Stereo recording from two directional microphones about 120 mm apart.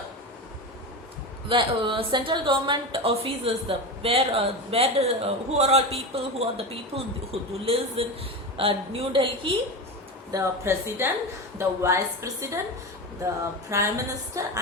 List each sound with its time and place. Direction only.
1.5 s a woman's voice: 45° right (ahead or behind)
10.3 s a woman's voice: 25° right (ahead or behind)
13.7 s a woman's voice: 25° right (ahead or behind)